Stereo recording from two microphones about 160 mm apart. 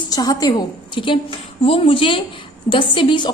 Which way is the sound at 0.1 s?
25° left (ahead or behind).